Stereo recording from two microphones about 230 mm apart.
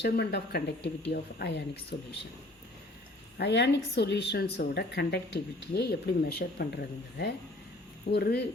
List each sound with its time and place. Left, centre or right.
0.0 s a woman's voice: left
3.3 s a woman's voice: left